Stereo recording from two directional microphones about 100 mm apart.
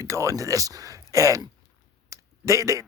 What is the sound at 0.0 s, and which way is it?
Speech, 30° right (ahead or behind).